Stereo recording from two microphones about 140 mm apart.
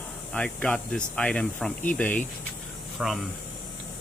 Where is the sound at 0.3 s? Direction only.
10° left (ahead or behind).